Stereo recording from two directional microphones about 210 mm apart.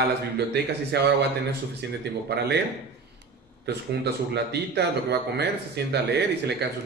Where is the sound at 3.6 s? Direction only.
55° right (ahead or behind).